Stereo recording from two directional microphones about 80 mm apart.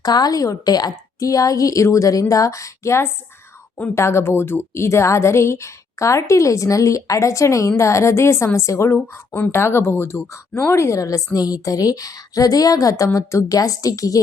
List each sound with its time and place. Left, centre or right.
0.0 s a woman's voice: left
9.1 s a woman's voice: left